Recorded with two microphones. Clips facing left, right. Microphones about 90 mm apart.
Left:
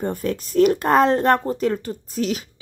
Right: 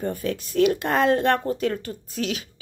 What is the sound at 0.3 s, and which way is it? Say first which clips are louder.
Speech: left 4 dB; 40° left (ahead or behind).